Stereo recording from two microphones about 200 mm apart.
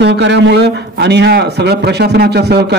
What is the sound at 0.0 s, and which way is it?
A man's voice, 60° right (ahead or behind).